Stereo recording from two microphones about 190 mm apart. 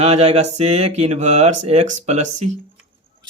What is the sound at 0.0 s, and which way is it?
Speech, 35° right (ahead or behind).